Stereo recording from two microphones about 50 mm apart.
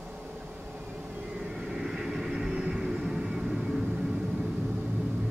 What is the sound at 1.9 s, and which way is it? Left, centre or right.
Vehicle, centre.